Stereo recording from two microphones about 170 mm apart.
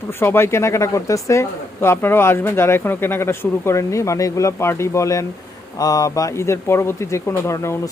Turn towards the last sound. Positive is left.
turn(degrees=15)  # may be behind; listen again after turning